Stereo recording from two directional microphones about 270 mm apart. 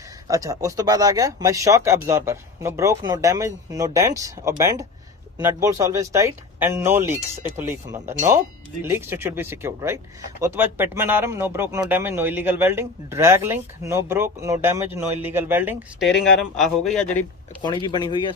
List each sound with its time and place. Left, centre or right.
0.3 s speech: centre
17.6 s speech: centre